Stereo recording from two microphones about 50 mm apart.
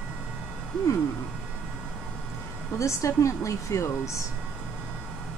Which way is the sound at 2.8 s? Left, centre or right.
Left.